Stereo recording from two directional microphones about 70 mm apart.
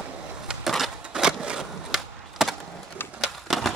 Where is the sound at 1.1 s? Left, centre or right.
Centre.